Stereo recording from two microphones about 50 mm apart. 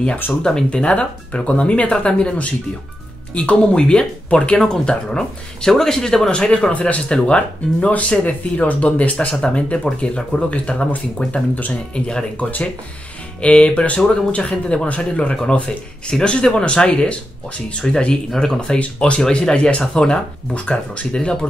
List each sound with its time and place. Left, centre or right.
0.4 s speech: centre; by 9.3 s left
9.4 s speech: centre
12.4 s speech: left
18.3 s speech: centre
18.6 s speech: left